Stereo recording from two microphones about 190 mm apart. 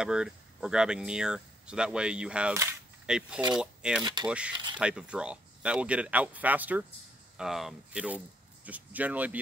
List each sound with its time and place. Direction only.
0.0 s speech: 5° right (ahead or behind)
4.0 s speech: 20° right (ahead or behind)
4.7 s speech: 5° right (ahead or behind)